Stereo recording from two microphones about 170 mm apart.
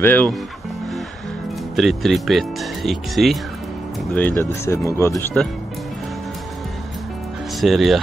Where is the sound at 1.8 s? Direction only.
Centre (ahead or behind).